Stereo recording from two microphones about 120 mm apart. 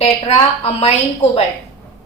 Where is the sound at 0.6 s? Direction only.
55° left (ahead or behind).